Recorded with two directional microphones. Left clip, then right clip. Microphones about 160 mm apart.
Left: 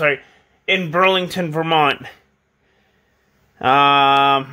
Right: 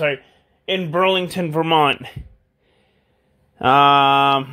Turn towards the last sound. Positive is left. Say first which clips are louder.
# left 1 dB
turn(degrees=-20)  # may be behind; listen again after turning